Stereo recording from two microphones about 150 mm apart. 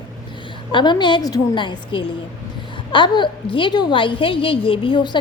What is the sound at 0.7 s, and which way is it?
A woman's voice, 30° left (ahead or behind).